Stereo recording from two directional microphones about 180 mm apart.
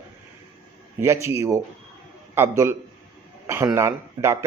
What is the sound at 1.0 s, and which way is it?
A man's voice, 15° right (ahead or behind).